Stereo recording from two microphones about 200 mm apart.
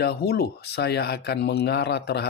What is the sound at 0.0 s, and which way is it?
A man's voice, 55° left (ahead or behind).